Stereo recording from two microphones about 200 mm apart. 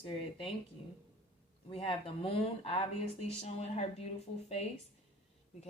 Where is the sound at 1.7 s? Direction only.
25° left (ahead or behind).